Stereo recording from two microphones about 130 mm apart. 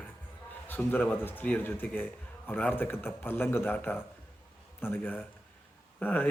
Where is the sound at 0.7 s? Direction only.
15° left (ahead or behind).